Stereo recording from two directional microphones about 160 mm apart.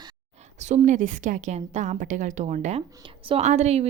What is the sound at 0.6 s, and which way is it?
A woman's voice, 50° right (ahead or behind).